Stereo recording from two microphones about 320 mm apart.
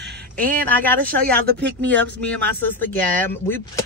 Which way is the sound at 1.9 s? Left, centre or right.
Centre.